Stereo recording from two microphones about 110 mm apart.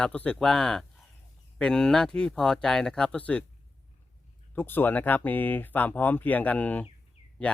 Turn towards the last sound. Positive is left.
turn(degrees=10)  # may be behind; listen again after turning